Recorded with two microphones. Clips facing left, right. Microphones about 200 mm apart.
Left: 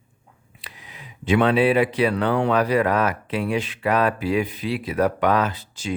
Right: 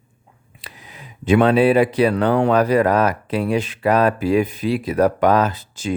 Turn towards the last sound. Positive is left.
turn(degrees=-45)  # may be behind; listen again after turning